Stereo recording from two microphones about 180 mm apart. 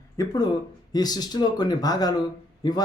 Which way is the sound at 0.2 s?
20° left (ahead or behind).